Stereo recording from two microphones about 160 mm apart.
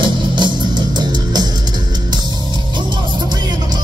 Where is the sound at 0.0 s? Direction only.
30° right (ahead or behind).